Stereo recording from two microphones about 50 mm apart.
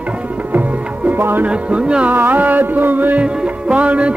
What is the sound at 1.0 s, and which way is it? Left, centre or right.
Music, right.